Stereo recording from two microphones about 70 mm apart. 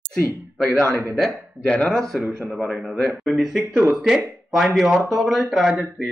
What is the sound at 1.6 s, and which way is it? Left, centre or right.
Speech, centre.